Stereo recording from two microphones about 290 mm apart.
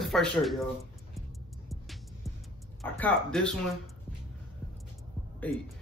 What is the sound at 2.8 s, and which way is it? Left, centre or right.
Speech, centre.